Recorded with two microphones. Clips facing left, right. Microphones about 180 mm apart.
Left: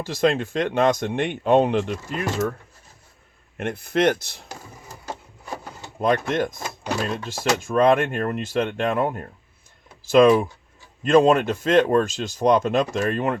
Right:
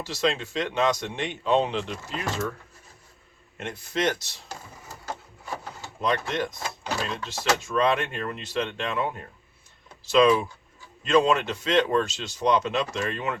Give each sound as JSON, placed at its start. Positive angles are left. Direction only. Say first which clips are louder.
{"t": 0.0, "sound": "speech", "louder": "left 6 dB", "side_deg": 50}
{"t": 3.6, "sound": "speech", "louder": "left 7 dB", "side_deg": 55}
{"t": 6.0, "sound": "speech", "louder": "left 5 dB", "side_deg": 50}